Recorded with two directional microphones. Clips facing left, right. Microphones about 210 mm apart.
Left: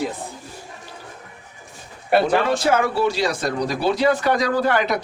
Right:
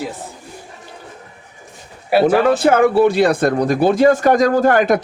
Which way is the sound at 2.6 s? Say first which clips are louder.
Right 7 dB; 55° right (ahead or behind).